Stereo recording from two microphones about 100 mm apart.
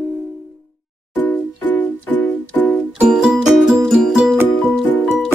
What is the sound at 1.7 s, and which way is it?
Music, 15° left (ahead or behind).